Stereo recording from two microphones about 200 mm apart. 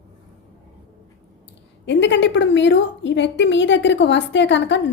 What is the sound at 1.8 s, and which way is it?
A woman's voice, 65° left (ahead or behind).